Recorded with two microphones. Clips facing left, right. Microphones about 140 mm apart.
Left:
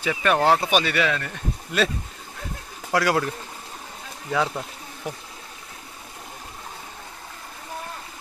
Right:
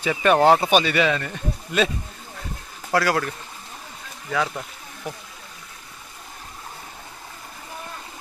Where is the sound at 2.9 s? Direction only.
15° left (ahead or behind).